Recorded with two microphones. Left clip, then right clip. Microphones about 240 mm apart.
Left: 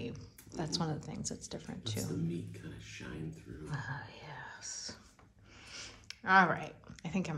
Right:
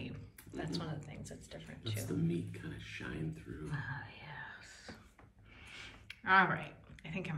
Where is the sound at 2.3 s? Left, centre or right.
Centre.